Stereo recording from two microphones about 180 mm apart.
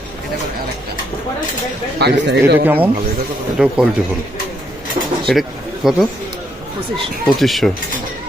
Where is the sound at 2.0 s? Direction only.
70° right (ahead or behind).